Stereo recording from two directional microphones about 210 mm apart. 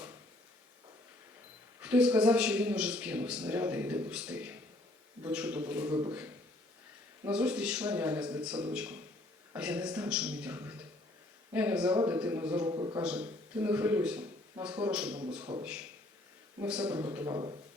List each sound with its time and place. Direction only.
1.8 s a man's voice: 5° right (ahead or behind)
5.9 s speech: 20° right (ahead or behind)
7.3 s a man's voice: 5° right (ahead or behind)
12.7 s speech: 20° right (ahead or behind)
13.0 s a man's voice: 5° right (ahead or behind); by 17.6 s 20° right (ahead or behind)